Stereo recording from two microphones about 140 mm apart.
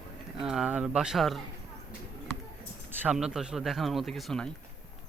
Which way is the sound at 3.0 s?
5° right (ahead or behind).